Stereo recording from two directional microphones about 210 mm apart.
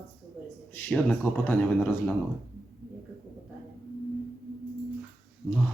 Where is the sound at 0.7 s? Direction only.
10° left (ahead or behind).